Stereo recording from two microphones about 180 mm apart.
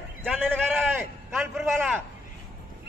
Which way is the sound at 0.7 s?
5° right (ahead or behind).